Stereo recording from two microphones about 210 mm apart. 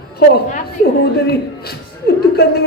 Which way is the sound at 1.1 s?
50° left (ahead or behind).